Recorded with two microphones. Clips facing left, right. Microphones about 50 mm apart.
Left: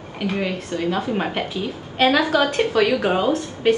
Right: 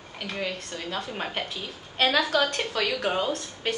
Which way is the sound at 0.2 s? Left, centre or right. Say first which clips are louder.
Left 8 dB; centre.